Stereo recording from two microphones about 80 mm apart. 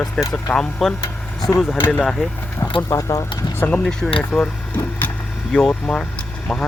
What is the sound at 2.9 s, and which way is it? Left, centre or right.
Speech, left.